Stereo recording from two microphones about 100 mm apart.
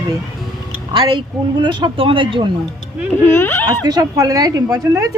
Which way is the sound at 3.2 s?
20° left (ahead or behind).